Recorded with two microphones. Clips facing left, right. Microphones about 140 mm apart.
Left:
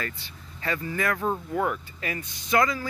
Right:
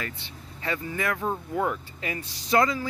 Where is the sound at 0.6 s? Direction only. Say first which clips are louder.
Left 1 dB; 20° right (ahead or behind).